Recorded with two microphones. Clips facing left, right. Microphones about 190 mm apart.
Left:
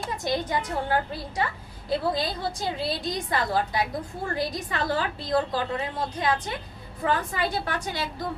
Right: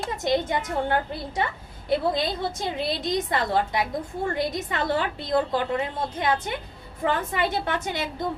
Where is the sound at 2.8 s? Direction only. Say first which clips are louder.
Right 3 dB; 20° right (ahead or behind).